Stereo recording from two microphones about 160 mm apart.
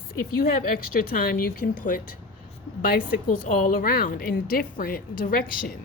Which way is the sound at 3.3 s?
60° left (ahead or behind).